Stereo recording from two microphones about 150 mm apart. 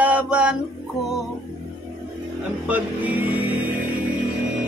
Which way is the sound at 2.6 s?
10° right (ahead or behind).